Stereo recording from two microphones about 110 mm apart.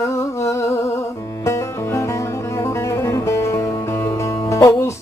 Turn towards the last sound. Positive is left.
turn(degrees=25)  # may be behind; listen again after turning